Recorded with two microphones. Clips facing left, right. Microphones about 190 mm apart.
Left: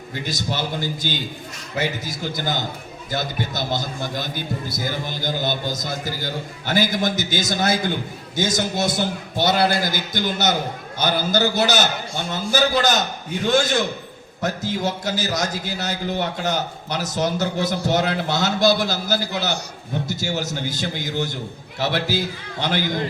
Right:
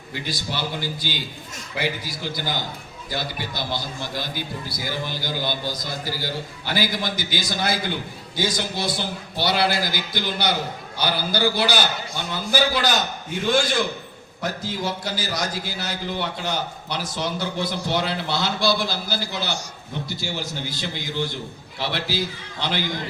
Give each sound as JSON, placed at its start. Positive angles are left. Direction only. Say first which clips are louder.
{"t": 0.3, "sound": "a man's voice", "louder": "left 3 dB", "side_deg": 45}